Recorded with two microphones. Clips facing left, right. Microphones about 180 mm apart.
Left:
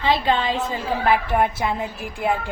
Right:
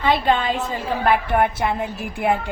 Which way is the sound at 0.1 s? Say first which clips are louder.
Right 1 dB; 50° right (ahead or behind).